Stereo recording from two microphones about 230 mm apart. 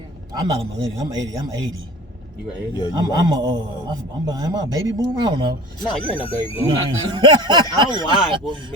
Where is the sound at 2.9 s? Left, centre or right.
Centre.